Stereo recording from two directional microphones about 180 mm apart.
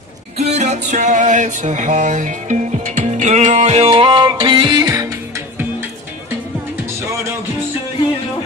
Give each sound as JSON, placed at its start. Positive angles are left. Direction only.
{"t": 0.4, "sound": "music", "side_deg": -40}